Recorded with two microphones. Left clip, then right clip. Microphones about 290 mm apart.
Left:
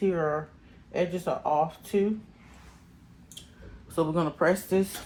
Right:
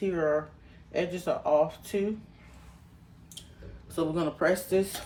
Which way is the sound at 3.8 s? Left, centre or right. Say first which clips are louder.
Left 2 dB; centre.